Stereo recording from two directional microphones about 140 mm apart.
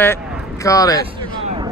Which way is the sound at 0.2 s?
5° right (ahead or behind).